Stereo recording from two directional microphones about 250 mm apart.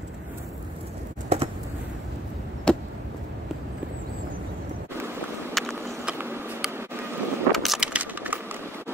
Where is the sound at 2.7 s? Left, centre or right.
Centre.